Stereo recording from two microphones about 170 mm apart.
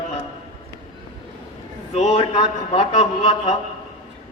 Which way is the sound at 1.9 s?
35° left (ahead or behind).